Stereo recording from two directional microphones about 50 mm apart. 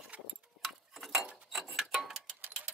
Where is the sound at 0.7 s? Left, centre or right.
Centre.